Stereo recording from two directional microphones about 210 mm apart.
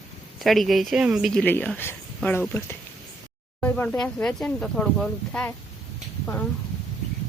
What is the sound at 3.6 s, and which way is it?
Speech, 5° left (ahead or behind).